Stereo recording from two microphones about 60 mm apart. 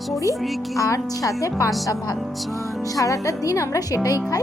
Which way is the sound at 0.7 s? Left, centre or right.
Left.